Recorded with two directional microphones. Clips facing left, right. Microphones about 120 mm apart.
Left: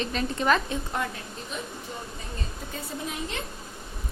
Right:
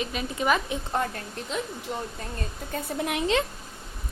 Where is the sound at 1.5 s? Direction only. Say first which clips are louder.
Right 5 dB; 90° right.